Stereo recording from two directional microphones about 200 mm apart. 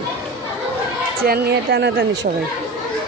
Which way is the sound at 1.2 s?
50° right (ahead or behind).